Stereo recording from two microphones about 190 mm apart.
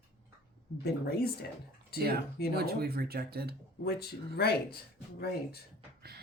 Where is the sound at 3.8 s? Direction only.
55° left (ahead or behind).